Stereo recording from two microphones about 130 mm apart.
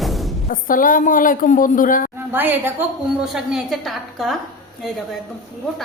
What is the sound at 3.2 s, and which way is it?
A woman's voice, 5° right (ahead or behind).